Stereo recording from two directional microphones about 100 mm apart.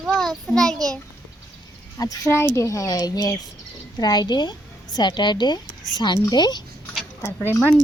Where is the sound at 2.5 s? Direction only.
30° left (ahead or behind).